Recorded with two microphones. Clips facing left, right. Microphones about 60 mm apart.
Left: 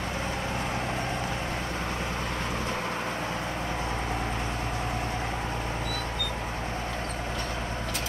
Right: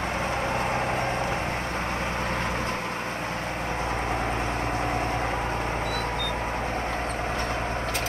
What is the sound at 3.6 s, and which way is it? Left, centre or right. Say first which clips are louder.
Vehicle: right 3 dB; right.